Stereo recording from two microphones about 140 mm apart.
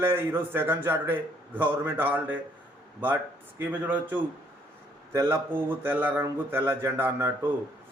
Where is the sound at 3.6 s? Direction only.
10° right (ahead or behind).